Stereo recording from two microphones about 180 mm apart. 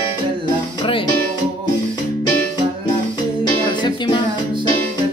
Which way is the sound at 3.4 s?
25° left (ahead or behind).